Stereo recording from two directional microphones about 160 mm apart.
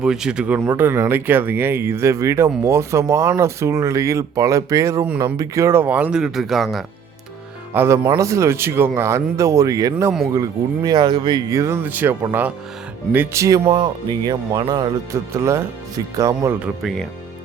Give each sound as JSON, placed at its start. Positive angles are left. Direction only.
{"t": 0.0, "sound": "speech", "side_deg": -5}
{"t": 7.7, "sound": "speech", "side_deg": -15}
{"t": 13.7, "sound": "speech", "side_deg": -30}
{"t": 16.6, "sound": "speech", "side_deg": -5}